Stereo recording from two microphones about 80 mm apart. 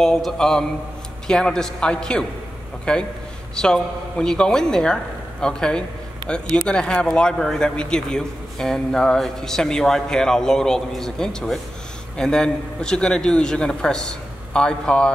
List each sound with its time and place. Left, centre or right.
0.0 s a man's voice: centre